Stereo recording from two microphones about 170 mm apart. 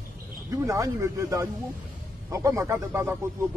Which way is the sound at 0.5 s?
20° right (ahead or behind).